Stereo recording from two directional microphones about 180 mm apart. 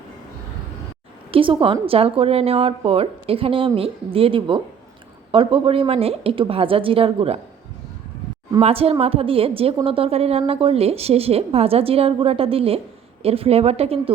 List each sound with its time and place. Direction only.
1.3 s a woman's voice: 30° right (ahead or behind)
8.6 s a woman's voice: 35° right (ahead or behind)